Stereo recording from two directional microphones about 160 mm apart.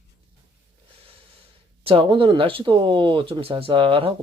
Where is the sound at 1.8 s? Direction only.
35° right (ahead or behind).